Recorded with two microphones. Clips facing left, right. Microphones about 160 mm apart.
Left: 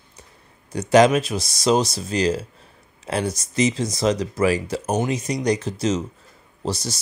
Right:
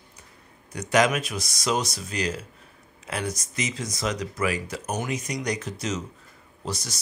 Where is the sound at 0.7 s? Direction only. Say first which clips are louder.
Left 7 dB; 30° left (ahead or behind).